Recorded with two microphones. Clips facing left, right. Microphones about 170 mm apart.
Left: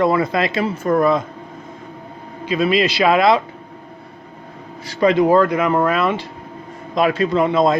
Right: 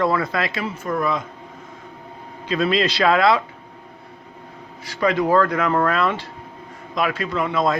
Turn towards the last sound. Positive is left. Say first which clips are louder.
# left 6 dB
turn(degrees=25)  # may be behind; listen again after turning